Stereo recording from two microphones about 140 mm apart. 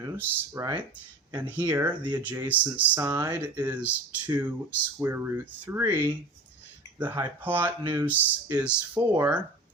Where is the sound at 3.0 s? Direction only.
25° right (ahead or behind).